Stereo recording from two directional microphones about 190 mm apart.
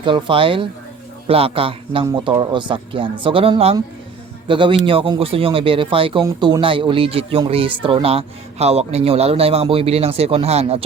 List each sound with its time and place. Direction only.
0.0 s a man's voice: 25° right (ahead or behind)